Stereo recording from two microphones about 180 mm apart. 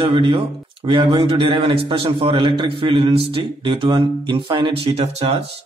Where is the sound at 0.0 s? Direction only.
25° right (ahead or behind).